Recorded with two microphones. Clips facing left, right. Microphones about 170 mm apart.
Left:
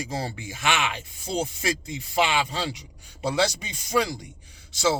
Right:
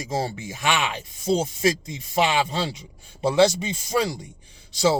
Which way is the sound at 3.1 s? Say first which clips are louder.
Right 6 dB; 25° right (ahead or behind).